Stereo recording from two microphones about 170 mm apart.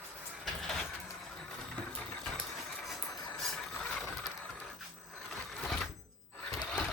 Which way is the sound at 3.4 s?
Centre (ahead or behind).